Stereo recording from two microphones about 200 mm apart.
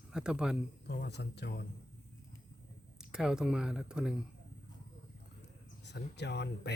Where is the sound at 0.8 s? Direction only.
55° left (ahead or behind).